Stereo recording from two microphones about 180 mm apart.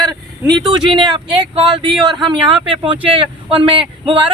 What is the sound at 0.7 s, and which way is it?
Speech, 25° right (ahead or behind).